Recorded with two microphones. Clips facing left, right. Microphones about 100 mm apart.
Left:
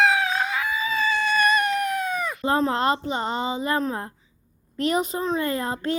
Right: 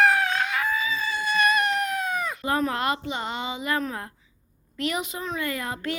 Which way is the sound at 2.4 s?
30° left (ahead or behind).